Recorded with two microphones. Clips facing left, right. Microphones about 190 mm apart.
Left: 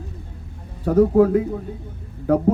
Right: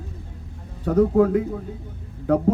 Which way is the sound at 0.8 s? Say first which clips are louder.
Left 2 dB; 35° left (ahead or behind).